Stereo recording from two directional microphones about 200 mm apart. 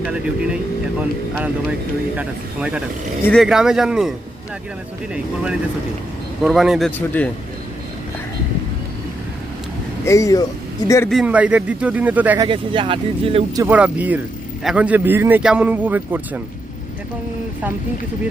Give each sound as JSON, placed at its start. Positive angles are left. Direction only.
{"t": 0.0, "sound": "speech", "side_deg": -5}
{"t": 5.1, "sound": "speech", "side_deg": -5}
{"t": 10.1, "sound": "speech", "side_deg": 15}
{"t": 11.1, "sound": "a man's voice", "side_deg": -5}
{"t": 12.5, "sound": "speech", "side_deg": -25}
{"t": 13.6, "sound": "a man's voice", "side_deg": -5}